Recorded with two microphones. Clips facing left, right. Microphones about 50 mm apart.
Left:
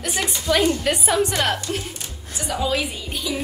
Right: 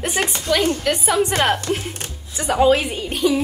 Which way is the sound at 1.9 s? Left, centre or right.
Right.